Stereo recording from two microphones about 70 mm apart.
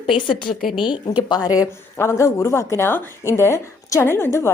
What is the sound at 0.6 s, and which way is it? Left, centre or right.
Speech, centre.